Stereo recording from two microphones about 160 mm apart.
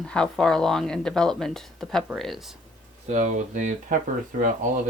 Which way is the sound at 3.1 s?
45° right (ahead or behind).